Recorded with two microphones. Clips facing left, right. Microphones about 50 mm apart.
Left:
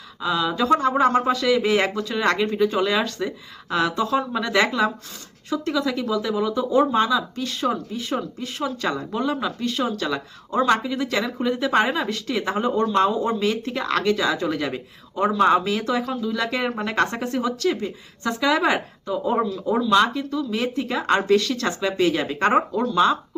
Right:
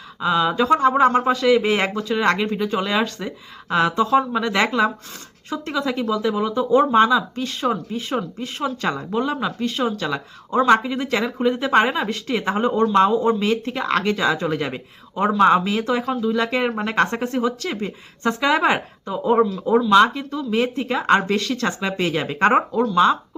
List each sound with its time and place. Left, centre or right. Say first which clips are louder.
0.2 s speech: right 4 dB; right
17.7 s speech: right 1 dB; right
19.4 s speech: right 5 dB; centre
22.7 s speech: right 3 dB; centre